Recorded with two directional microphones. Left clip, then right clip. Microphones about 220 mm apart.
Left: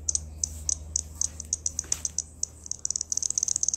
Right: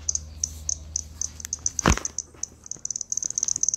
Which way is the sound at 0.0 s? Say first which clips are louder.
Right 2 dB; 50° left (ahead or behind).